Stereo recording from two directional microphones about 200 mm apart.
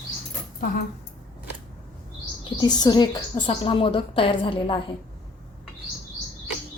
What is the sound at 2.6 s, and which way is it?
A woman's voice, 20° left (ahead or behind).